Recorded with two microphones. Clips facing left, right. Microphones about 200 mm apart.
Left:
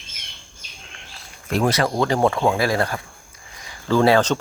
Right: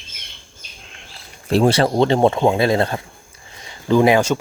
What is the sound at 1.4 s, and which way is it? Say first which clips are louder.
Speech: right 5 dB; 30° right (ahead or behind).